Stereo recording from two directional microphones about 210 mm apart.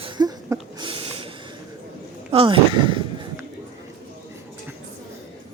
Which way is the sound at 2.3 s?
25° right (ahead or behind).